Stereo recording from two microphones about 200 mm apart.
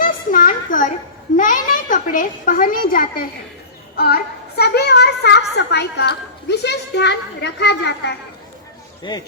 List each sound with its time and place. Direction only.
0.0 s a sound: 40° left (ahead or behind)
1.4 s a woman's voice: 40° left (ahead or behind); by 8.1 s 60° left (ahead or behind)
9.1 s speech: 20° left (ahead or behind)